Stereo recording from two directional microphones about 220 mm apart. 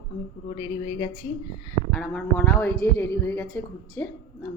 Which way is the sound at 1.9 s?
5° left (ahead or behind).